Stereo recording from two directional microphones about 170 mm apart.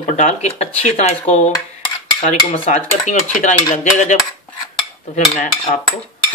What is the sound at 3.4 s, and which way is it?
Dishes, 45° left (ahead or behind).